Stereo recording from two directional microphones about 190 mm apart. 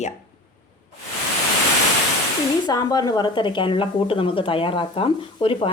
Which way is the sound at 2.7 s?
20° left (ahead or behind).